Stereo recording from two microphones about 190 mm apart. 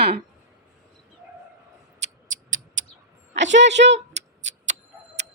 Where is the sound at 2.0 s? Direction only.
90° right.